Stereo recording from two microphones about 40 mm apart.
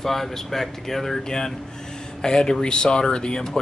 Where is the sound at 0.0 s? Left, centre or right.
Centre.